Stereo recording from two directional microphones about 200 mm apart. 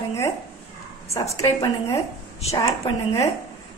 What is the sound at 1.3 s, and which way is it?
A woman's voice, 15° left (ahead or behind).